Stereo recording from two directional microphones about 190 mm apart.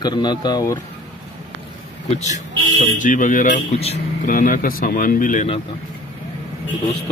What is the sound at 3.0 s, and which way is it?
Speech, 45° left (ahead or behind).